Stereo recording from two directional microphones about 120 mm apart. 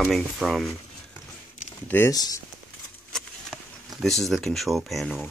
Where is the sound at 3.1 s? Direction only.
Centre (ahead or behind).